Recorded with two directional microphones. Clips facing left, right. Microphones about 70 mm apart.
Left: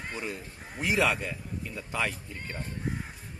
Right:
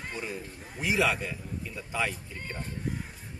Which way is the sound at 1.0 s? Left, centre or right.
Centre.